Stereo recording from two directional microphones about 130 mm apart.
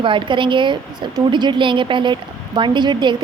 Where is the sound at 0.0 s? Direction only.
40° right (ahead or behind).